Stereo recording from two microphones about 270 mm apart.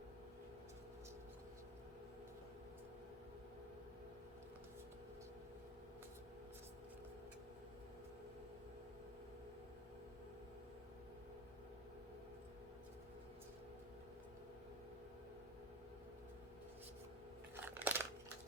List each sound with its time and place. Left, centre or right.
17.6 s crunch: centre